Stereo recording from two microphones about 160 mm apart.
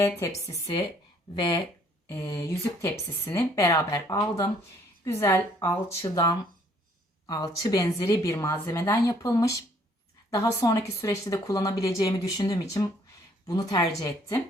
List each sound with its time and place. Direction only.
0.0 s speech: 20° left (ahead or behind)
2.0 s a woman's voice: 15° left (ahead or behind)